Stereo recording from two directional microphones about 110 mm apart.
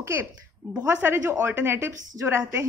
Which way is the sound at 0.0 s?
25° right (ahead or behind).